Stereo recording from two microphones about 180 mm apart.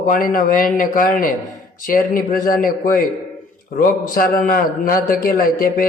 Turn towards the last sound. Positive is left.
turn(degrees=50)  # may be behind; listen again after turning